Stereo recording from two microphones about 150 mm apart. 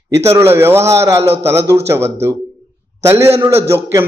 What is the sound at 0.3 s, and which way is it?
A man's voice, 15° right (ahead or behind).